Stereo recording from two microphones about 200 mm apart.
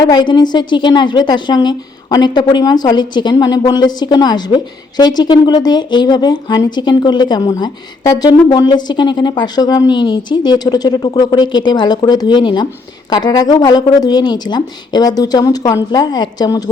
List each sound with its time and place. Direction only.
0.0 s a woman's voice: 20° left (ahead or behind)